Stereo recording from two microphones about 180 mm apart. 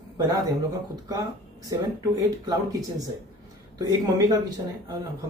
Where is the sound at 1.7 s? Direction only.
20° right (ahead or behind).